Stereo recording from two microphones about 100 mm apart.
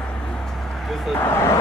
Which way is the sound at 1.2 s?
25° left (ahead or behind).